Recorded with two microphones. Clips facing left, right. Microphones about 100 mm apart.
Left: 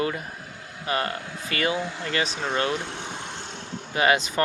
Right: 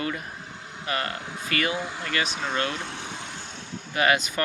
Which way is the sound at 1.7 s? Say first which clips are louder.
Left 2 dB; 15° right (ahead or behind).